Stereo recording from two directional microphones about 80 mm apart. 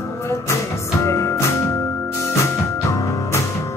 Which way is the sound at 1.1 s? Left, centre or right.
Left.